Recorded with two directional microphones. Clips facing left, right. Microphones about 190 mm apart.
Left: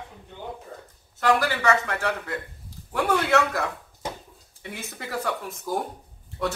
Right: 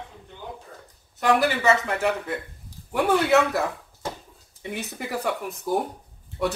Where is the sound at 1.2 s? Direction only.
20° right (ahead or behind).